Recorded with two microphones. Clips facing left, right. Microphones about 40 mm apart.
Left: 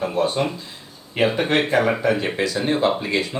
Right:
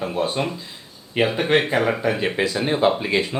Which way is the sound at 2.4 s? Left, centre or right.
Right.